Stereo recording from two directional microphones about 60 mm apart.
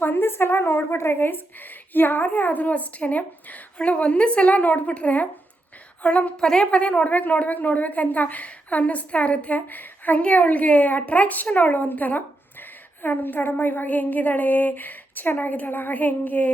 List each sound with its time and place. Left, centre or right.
0.0 s a woman's voice: left